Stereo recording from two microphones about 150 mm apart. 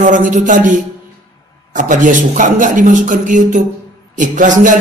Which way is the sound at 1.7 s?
60° right (ahead or behind).